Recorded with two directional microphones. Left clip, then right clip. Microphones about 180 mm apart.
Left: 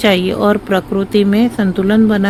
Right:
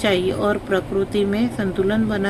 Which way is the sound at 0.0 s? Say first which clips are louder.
Left 6 dB; 50° left (ahead or behind).